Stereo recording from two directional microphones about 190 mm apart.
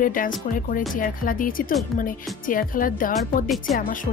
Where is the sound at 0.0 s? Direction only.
45° left (ahead or behind).